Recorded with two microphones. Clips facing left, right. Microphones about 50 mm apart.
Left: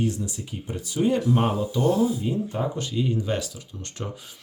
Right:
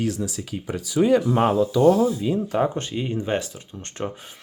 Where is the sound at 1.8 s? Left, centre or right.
Right.